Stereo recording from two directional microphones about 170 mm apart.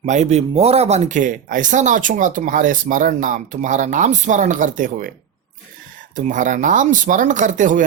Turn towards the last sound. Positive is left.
turn(degrees=-50)  # may be behind; listen again after turning